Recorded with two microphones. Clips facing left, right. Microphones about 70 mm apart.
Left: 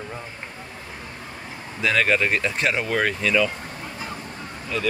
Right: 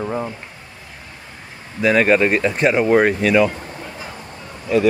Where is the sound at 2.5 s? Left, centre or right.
Centre.